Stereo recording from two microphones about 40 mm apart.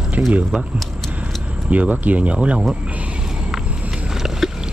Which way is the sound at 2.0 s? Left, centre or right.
Right.